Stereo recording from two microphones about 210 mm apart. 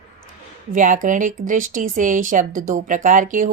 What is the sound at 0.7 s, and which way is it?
Speech, 40° right (ahead or behind).